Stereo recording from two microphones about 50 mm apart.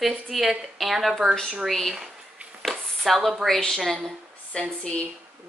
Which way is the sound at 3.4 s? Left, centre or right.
Centre.